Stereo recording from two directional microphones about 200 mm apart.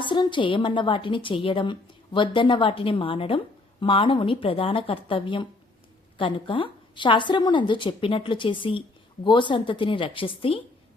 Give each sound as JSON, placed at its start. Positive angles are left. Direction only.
{"t": 0.0, "sound": "a woman's voice", "side_deg": 25}